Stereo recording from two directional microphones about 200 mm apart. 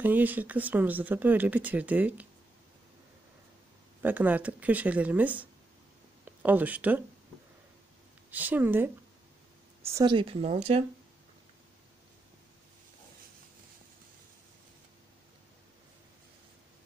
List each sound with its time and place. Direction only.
0.0 s speech: 10° right (ahead or behind)
4.0 s speech: 10° right (ahead or behind)
8.3 s speech: 10° right (ahead or behind); by 10.6 s 30° right (ahead or behind)